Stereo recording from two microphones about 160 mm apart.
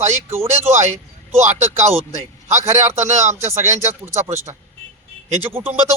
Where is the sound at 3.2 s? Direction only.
15° right (ahead or behind).